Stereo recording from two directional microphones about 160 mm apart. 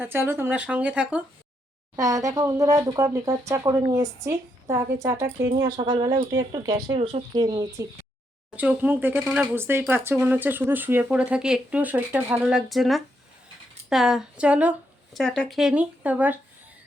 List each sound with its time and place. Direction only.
0.0 s speech: 15° right (ahead or behind)
2.0 s speech: 20° right (ahead or behind)
8.5 s speech: 10° right (ahead or behind)
15.2 s speech: 5° left (ahead or behind)